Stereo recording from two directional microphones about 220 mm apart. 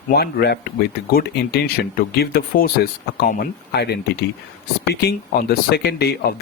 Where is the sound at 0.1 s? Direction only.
45° left (ahead or behind).